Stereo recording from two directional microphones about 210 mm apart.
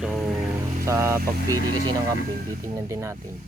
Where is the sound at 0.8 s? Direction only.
15° right (ahead or behind).